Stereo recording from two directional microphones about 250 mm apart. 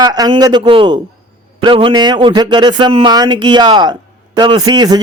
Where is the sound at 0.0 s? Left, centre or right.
Centre.